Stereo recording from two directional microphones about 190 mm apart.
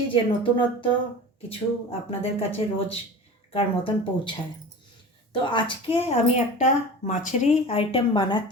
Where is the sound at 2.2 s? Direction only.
30° left (ahead or behind).